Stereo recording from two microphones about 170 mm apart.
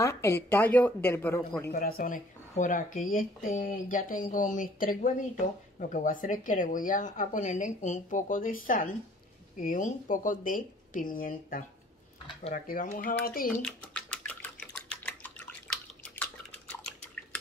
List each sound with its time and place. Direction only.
0.0 s speech: 15° left (ahead or behind)
1.7 s speech: 60° left (ahead or behind)
13.6 s bathtub: 5° left (ahead or behind)
14.9 s drip: 10° left (ahead or behind)